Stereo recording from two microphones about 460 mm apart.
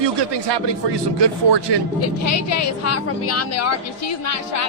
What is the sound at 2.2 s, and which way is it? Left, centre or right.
A woman's voice, left.